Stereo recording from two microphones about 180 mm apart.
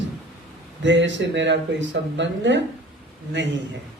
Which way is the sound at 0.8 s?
85° right.